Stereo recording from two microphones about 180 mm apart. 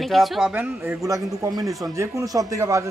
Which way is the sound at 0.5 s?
10° right (ahead or behind).